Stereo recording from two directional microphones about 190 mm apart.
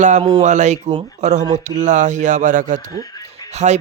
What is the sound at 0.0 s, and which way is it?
Speech, 40° right (ahead or behind).